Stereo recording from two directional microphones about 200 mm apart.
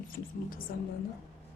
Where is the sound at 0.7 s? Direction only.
45° left (ahead or behind).